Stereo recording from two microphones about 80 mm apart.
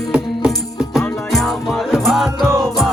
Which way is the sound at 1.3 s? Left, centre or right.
Centre.